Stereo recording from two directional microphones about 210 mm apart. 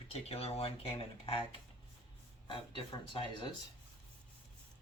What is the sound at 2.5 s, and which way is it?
Speech, 25° left (ahead or behind).